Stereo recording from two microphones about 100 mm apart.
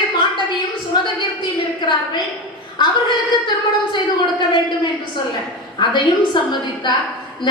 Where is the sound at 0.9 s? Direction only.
50° left (ahead or behind).